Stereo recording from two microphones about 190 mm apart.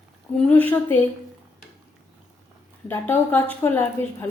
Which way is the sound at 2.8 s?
10° left (ahead or behind).